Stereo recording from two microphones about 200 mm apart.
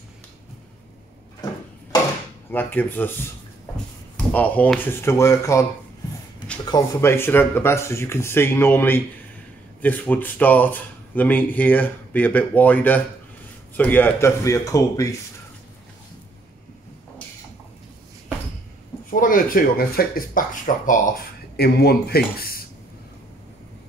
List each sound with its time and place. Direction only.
2.5 s speech: 10° left (ahead or behind)
4.3 s speech: 5° left (ahead or behind)
19.0 s speech: 45° left (ahead or behind)
21.5 s speech: 50° left (ahead or behind)